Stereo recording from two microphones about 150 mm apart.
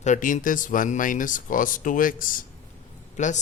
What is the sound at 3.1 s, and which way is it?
Speech, 55° left (ahead or behind).